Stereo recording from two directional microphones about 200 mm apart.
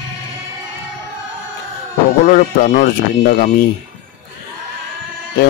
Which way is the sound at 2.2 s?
45° left (ahead or behind).